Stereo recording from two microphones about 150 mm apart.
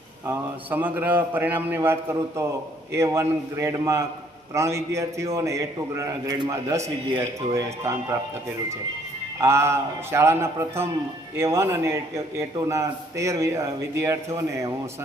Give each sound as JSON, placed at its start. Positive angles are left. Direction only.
{"t": 0.3, "sound": "a man's voice", "side_deg": -10}
{"t": 9.4, "sound": "a man's voice", "side_deg": -15}